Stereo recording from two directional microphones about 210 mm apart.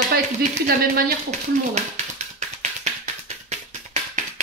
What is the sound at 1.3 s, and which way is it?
Tap, 30° right (ahead or behind).